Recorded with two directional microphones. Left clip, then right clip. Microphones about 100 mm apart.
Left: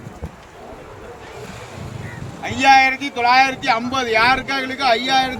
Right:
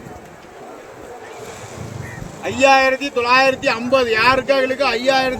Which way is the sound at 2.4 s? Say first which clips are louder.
Even; 60° left (ahead or behind).